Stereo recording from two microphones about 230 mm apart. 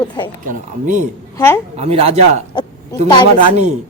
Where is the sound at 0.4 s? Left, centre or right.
Right.